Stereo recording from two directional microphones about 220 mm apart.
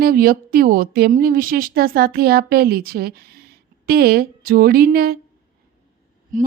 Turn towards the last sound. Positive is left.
turn(degrees=-35)  # may be behind; listen again after turning